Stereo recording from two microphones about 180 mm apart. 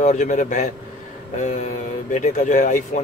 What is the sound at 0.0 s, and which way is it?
Speech, 45° left (ahead or behind).